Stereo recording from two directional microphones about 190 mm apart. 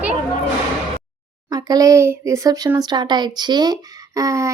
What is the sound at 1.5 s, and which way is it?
Speech, 20° right (ahead or behind).